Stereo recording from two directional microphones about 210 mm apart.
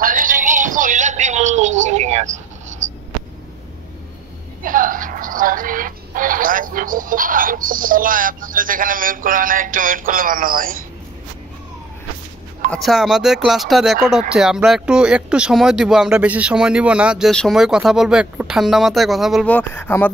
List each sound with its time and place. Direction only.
0.0 s music: 40° right (ahead or behind)
4.6 s speech: 40° right (ahead or behind)
12.7 s speech: centre (ahead or behind)